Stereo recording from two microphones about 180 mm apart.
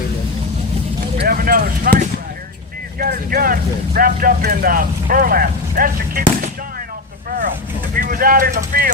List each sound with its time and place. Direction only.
1.2 s a sound: 55° right (ahead or behind)
3.0 s speech: 55° right (ahead or behind)
7.3 s vehicle: 50° right (ahead or behind)
7.9 s speech: 50° right (ahead or behind)